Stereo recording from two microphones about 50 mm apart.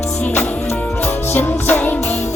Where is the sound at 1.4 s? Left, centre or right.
Left.